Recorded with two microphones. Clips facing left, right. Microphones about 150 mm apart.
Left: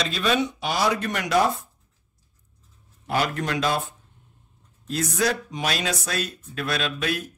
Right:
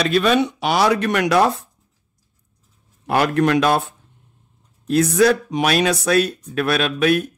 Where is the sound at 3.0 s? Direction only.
65° right (ahead or behind).